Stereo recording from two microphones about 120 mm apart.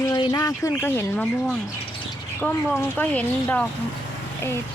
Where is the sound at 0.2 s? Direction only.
30° left (ahead or behind).